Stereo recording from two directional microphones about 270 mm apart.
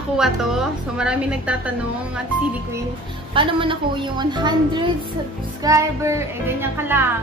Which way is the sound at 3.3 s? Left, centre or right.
Centre.